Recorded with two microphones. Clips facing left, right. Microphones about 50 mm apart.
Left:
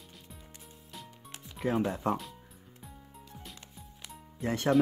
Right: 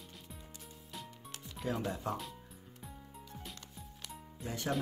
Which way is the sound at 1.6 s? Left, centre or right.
Left.